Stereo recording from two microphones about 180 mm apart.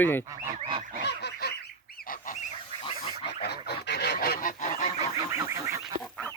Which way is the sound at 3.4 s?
65° left (ahead or behind).